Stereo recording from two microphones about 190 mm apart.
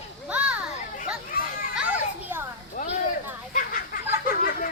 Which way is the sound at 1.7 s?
5° right (ahead or behind).